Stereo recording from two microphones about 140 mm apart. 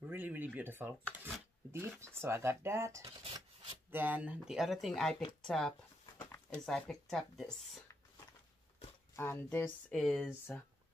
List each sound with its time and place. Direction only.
0.0 s speech: 10° right (ahead or behind)
5.4 s a sound: 5° left (ahead or behind)
6.5 s speech: 5° left (ahead or behind)
9.1 s speech: 15° left (ahead or behind)
9.9 s speech: 5° left (ahead or behind)